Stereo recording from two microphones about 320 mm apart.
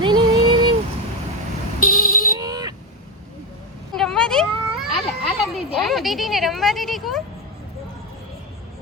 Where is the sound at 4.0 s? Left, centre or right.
Centre.